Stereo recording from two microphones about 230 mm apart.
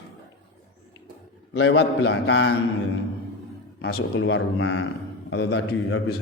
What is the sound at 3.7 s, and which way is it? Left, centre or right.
A man's voice, left.